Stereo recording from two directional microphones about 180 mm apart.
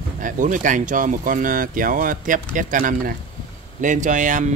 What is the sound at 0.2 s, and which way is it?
Speech, 45° right (ahead or behind).